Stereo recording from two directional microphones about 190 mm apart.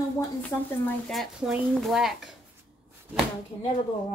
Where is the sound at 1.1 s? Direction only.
Centre (ahead or behind).